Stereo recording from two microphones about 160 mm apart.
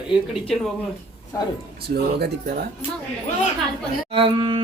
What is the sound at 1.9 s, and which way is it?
Speech, 80° right.